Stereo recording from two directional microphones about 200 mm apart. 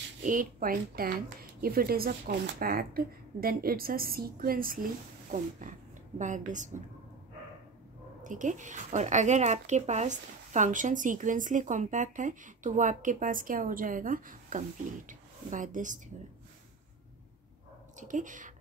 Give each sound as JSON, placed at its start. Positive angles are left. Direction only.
{"t": 0.2, "sound": "a woman's voice", "side_deg": -40}
{"t": 8.2, "sound": "speech", "side_deg": -40}
{"t": 17.9, "sound": "speech", "side_deg": -40}